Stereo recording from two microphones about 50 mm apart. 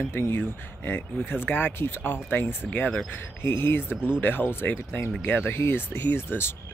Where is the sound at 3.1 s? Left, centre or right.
Left.